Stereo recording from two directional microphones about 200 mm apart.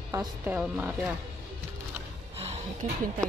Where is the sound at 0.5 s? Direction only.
5° right (ahead or behind).